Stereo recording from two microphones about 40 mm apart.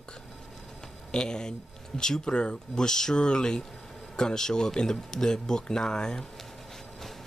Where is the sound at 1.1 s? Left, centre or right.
Centre.